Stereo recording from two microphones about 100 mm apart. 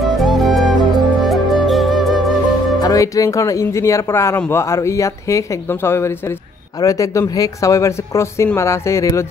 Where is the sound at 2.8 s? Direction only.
35° left (ahead or behind).